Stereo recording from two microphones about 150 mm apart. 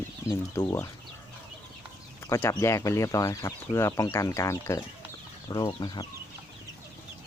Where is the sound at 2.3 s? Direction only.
20° left (ahead or behind).